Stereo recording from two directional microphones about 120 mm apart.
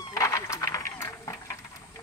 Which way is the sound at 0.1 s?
25° left (ahead or behind).